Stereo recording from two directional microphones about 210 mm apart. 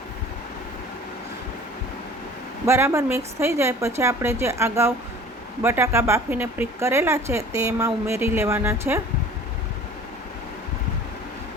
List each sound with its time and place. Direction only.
2.6 s a woman's voice: 10° right (ahead or behind)